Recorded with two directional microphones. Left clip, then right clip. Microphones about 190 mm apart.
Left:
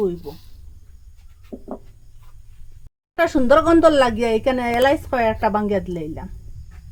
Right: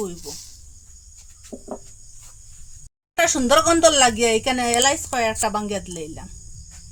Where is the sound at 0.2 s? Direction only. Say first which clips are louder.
Even; 15° right (ahead or behind).